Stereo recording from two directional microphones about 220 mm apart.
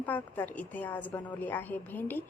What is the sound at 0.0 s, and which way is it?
A woman's voice, 10° left (ahead or behind).